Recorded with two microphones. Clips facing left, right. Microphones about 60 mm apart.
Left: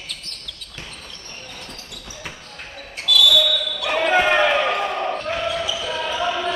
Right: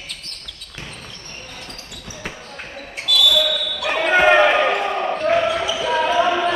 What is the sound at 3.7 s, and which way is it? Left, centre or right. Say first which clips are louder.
Basketball bounce: right 2 dB; centre.